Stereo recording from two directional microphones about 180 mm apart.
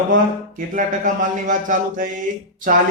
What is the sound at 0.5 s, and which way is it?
Mantra, 45° right (ahead or behind).